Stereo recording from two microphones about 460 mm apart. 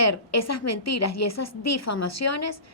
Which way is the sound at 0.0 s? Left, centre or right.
Left.